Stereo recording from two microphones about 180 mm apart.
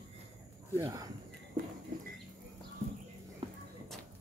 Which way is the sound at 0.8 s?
20° right (ahead or behind).